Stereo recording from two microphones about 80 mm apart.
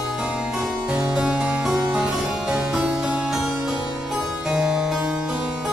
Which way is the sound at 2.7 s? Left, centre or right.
Centre.